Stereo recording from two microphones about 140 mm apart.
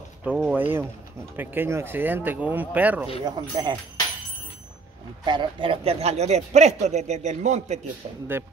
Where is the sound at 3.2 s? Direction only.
30° right (ahead or behind).